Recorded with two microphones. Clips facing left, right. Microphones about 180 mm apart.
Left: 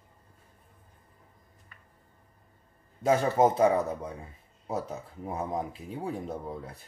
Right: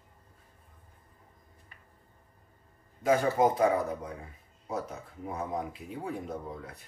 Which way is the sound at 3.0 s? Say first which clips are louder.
Left 2 dB; 25° left (ahead or behind).